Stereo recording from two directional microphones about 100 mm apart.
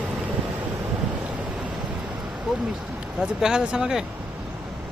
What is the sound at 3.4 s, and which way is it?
Speech, 5° right (ahead or behind).